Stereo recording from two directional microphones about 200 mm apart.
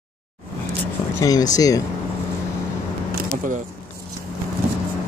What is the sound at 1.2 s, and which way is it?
Speech, 20° left (ahead or behind).